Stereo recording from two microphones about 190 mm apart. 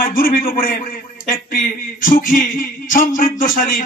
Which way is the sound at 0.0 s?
50° left (ahead or behind).